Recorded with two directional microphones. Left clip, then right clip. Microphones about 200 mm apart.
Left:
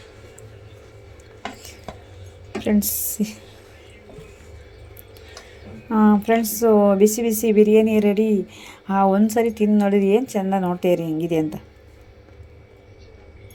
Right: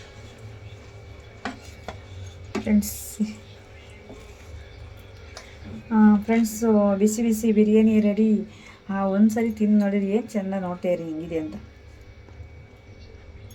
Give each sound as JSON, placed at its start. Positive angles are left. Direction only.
{"t": 3.2, "sound": "speech", "side_deg": 50}
{"t": 5.9, "sound": "speech", "side_deg": 40}